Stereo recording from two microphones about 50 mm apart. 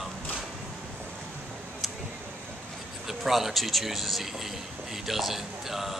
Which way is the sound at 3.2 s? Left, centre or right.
Centre.